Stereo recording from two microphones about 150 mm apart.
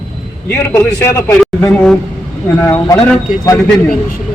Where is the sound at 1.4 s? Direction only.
5° left (ahead or behind).